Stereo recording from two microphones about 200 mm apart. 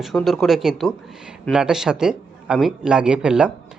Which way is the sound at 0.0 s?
Centre (ahead or behind).